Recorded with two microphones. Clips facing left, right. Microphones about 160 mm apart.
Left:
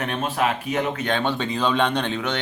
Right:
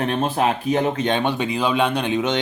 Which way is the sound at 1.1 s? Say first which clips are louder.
Right 3 dB; 15° right (ahead or behind).